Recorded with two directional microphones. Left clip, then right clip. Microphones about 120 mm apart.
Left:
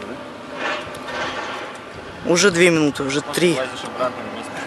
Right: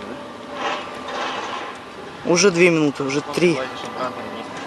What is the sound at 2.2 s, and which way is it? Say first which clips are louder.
A man's voice: even; 5° left (ahead or behind).